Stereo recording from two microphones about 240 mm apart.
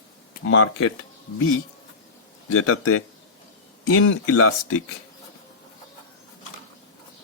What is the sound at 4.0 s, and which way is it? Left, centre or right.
Speech, left.